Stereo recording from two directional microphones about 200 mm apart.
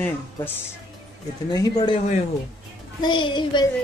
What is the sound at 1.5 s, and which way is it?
Speech, 20° left (ahead or behind).